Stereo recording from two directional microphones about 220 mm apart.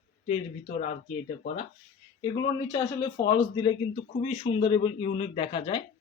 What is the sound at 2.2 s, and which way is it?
A man's voice, 20° left (ahead or behind).